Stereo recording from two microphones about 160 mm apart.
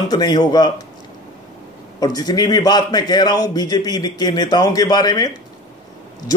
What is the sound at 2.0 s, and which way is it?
A man's voice, 25° left (ahead or behind).